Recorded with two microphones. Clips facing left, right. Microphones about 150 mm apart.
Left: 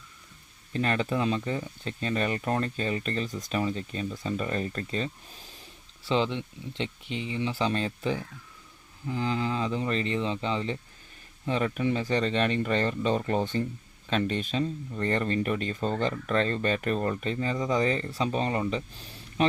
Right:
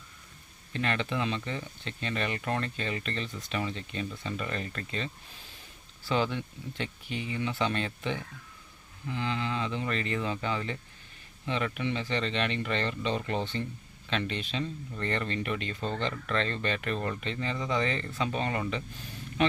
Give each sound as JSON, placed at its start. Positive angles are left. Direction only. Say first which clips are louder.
{"t": 0.7, "sound": "speech", "louder": "left 4 dB", "side_deg": 40}
{"t": 6.1, "sound": "speech", "louder": "left 2 dB", "side_deg": 25}
{"t": 11.4, "sound": "speech", "louder": "left 4 dB", "side_deg": 40}